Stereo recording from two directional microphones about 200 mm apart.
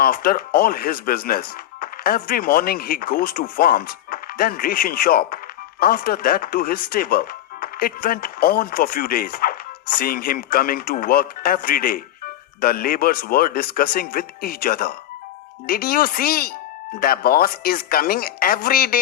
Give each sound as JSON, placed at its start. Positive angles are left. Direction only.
{"t": 0.0, "sound": "speech", "side_deg": 45}